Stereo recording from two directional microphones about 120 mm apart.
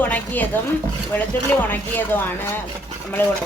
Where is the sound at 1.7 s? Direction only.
15° left (ahead or behind).